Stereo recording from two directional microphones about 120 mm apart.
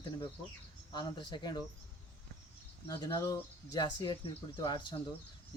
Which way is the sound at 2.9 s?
30° left (ahead or behind).